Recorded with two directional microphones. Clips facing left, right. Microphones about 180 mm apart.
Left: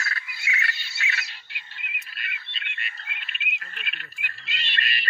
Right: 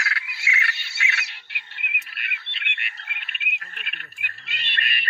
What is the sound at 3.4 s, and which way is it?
Bird, 55° right (ahead or behind).